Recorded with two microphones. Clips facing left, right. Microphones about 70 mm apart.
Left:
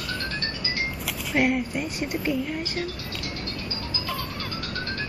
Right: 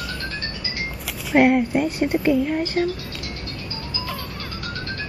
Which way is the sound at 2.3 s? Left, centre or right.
Right.